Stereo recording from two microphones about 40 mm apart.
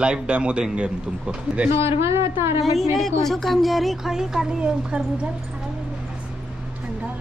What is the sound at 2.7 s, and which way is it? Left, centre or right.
Speech, centre.